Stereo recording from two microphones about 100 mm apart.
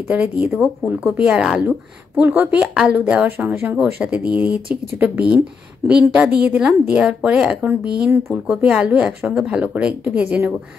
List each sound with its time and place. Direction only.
0.1 s a woman's voice: 15° right (ahead or behind)